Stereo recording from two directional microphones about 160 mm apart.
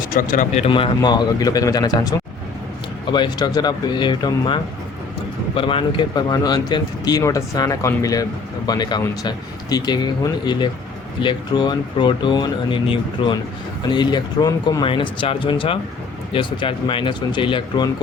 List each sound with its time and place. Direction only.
0.1 s speech: 55° left (ahead or behind); by 17.8 s 30° left (ahead or behind)